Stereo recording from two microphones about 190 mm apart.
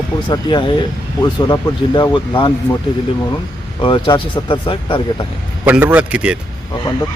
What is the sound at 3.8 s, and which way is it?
Speech, 25° left (ahead or behind).